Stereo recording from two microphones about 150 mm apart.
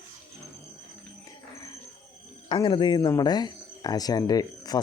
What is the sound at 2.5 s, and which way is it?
Speech, 35° left (ahead or behind).